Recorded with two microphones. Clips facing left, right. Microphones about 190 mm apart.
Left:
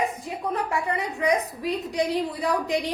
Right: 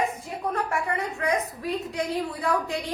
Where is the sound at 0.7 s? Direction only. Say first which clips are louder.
Left 1 dB; 15° left (ahead or behind).